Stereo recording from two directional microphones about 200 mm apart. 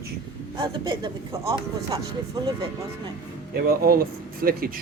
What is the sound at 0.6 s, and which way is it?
Speech, 25° right (ahead or behind).